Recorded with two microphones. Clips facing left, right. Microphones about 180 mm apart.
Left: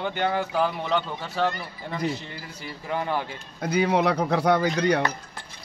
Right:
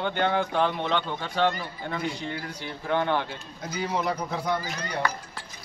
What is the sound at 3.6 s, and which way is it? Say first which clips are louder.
A man's voice: left 7 dB; 60° left (ahead or behind).